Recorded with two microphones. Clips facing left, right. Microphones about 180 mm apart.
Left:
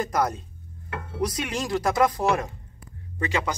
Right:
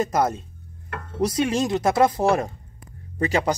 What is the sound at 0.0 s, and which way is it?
Speech, 25° right (ahead or behind).